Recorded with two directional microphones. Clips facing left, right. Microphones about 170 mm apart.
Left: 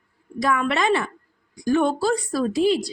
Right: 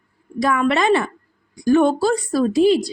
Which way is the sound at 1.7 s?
45° right (ahead or behind).